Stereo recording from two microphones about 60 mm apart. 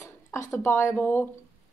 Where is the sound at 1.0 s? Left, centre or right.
Left.